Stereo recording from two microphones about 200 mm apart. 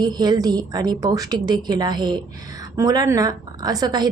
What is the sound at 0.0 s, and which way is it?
A woman's voice, 20° right (ahead or behind).